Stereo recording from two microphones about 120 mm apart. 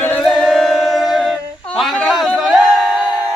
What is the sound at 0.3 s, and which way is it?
A capella, centre (ahead or behind).